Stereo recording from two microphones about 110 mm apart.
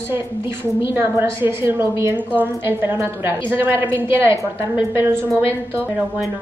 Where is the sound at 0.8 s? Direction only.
20° right (ahead or behind).